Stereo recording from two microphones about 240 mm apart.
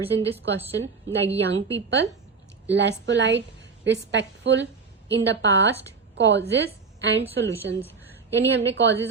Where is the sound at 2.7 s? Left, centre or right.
Right.